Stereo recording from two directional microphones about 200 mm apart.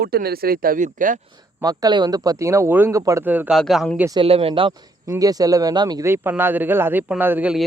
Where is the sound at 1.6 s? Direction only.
20° right (ahead or behind); by 4.0 s centre (ahead or behind).